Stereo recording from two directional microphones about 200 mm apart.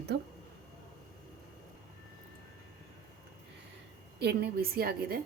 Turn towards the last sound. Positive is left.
turn(degrees=-50)  # may be behind; listen again after turning